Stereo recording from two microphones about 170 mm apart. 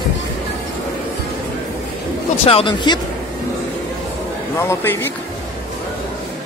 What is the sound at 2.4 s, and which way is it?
Speech, 35° left (ahead or behind).